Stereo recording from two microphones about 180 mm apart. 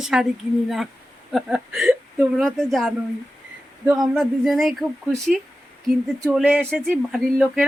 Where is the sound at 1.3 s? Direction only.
Centre (ahead or behind).